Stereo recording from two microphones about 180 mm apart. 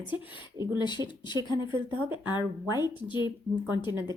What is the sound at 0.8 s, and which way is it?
Speech, 25° left (ahead or behind).